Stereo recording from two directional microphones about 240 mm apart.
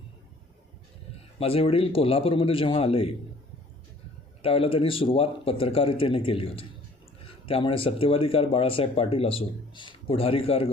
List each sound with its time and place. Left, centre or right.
1.4 s speech: left
4.4 s speech: left